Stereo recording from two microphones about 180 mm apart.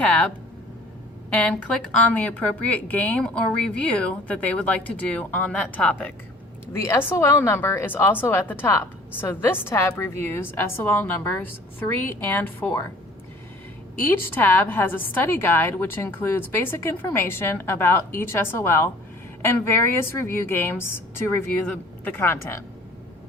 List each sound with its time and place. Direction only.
0.0 s a woman's voice: 5° left (ahead or behind)
14.3 s a woman's voice: 10° left (ahead or behind)